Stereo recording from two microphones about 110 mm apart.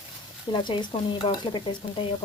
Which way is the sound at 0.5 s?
45° left (ahead or behind).